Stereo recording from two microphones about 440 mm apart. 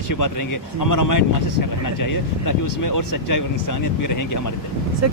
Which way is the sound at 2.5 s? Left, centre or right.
Left.